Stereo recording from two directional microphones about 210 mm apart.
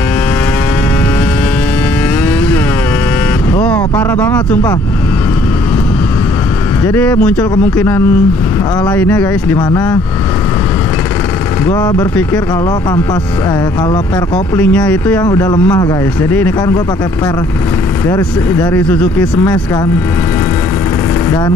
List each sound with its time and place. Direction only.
3.5 s a sound: 5° left (ahead or behind)
6.9 s speech: 5° left (ahead or behind)
11.7 s speech: 5° left (ahead or behind)
14.3 s speech: 5° left (ahead or behind)
15.2 s speech: 20° left (ahead or behind)
18.1 s speech: 10° left (ahead or behind)